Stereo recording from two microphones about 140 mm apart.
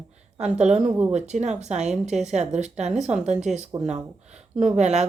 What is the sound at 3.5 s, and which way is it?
Speech, centre (ahead or behind).